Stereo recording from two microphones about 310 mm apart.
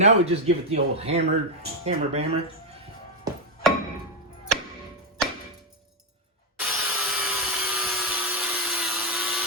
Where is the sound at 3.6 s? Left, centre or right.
Centre.